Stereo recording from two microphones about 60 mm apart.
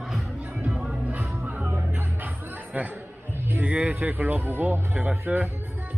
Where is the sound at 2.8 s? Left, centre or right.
Right.